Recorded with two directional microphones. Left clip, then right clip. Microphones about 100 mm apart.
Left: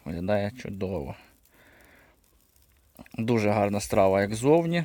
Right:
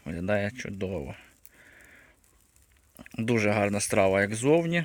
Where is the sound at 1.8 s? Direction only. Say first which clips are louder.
Right 2 dB; 20° left (ahead or behind).